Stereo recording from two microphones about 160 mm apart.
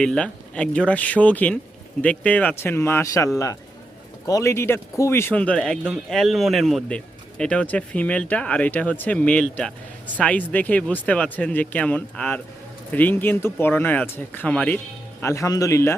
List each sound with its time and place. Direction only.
0.0 s a man's voice: 5° left (ahead or behind)